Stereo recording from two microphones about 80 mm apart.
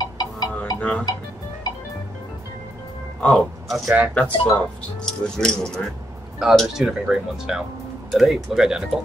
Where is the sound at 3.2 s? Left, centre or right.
Centre.